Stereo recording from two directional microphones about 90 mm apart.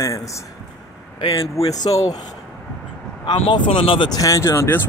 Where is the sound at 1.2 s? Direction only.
90° left.